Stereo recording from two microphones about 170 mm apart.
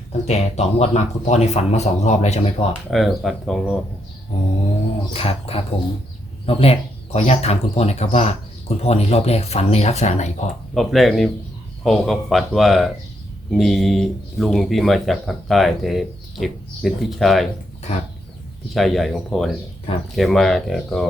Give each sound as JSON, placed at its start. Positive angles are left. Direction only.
{"t": 0.1, "sound": "speech", "side_deg": 40}
{"t": 2.9, "sound": "speech", "side_deg": 0}
{"t": 5.1, "sound": "speech", "side_deg": 35}
{"t": 10.8, "sound": "speech", "side_deg": 0}
{"t": 18.7, "sound": "speech", "side_deg": 0}